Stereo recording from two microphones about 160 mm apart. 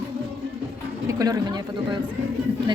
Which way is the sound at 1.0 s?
20° right (ahead or behind).